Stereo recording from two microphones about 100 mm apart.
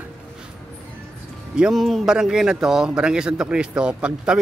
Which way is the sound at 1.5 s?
5° right (ahead or behind).